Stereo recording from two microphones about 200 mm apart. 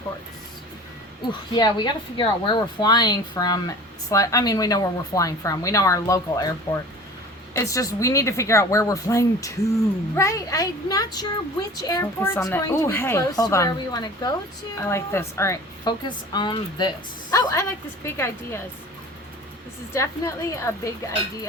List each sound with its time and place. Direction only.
1.3 s speech: 20° left (ahead or behind)
19.9 s speech: 15° left (ahead or behind)